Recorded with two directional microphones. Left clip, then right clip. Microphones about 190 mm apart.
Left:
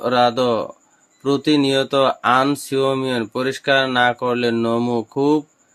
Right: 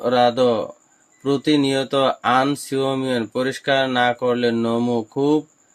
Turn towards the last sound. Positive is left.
turn(degrees=20)  # may be behind; listen again after turning